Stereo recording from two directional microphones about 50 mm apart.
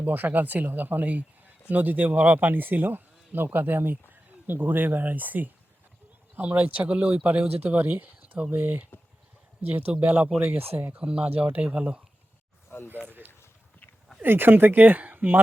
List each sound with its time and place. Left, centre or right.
0.0 s speech: right
9.9 s speech: right
10.9 s speech: right
12.7 s a sound: left
14.2 s speech: right